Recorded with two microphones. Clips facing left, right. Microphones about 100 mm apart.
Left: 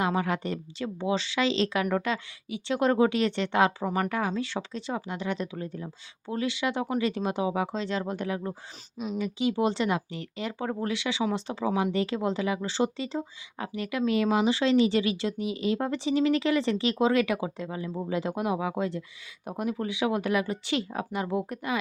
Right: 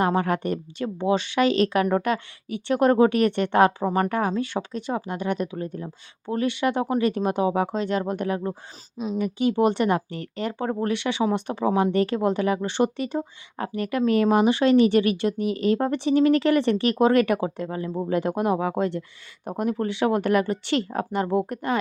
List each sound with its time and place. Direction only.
0.1 s speech: 50° right (ahead or behind)
3.8 s speech: 35° right (ahead or behind)
4.1 s speech: 45° right (ahead or behind)
10.5 s speech: 45° right (ahead or behind); by 19.0 s 60° right (ahead or behind)
19.5 s speech: 50° right (ahead or behind)